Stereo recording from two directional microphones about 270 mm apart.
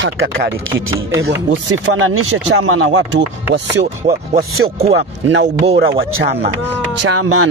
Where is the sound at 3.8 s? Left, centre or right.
Right.